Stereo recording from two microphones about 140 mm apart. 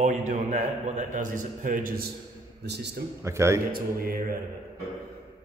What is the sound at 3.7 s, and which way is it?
Speech, 90° right.